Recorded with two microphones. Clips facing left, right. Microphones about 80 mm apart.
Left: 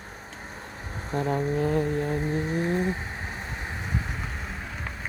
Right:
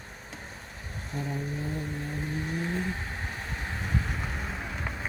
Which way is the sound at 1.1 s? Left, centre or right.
Left.